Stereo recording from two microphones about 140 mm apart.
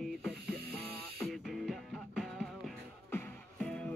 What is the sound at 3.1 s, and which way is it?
Music, 15° left (ahead or behind).